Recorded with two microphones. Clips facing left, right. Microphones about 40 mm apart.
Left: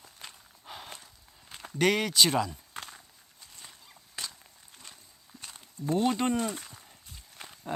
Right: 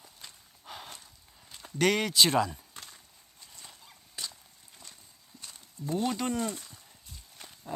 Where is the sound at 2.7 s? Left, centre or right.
Left.